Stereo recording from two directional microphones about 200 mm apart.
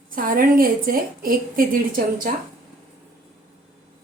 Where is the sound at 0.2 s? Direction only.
45° right (ahead or behind).